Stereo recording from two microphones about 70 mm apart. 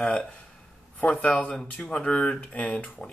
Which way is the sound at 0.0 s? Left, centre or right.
Centre.